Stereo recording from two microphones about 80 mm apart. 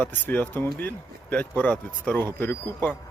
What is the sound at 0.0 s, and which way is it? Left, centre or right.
Speech, left.